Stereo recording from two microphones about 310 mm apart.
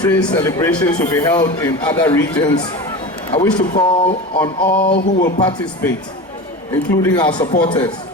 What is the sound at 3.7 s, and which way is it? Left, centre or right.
Speech, centre.